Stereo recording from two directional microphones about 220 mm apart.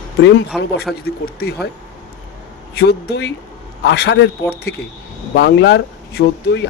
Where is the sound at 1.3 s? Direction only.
45° left (ahead or behind).